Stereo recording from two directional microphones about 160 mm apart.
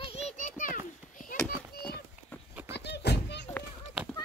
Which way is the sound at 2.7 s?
90° left.